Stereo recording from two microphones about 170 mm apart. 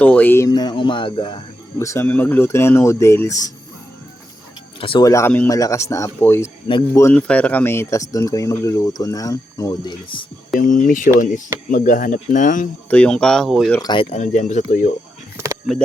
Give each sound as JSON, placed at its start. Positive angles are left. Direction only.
{"t": 0.0, "sound": "speech", "side_deg": 10}
{"t": 1.8, "sound": "speech", "side_deg": 15}
{"t": 4.8, "sound": "speech", "side_deg": 25}
{"t": 6.7, "sound": "speech", "side_deg": 30}
{"t": 7.0, "sound": "speech", "side_deg": 10}
{"t": 10.6, "sound": "speech", "side_deg": 50}
{"t": 12.9, "sound": "speech", "side_deg": 5}
{"t": 13.7, "sound": "speech", "side_deg": 25}
{"t": 14.2, "sound": "speech", "side_deg": 45}